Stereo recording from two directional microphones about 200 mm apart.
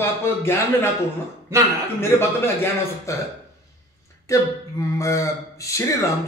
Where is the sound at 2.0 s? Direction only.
10° left (ahead or behind).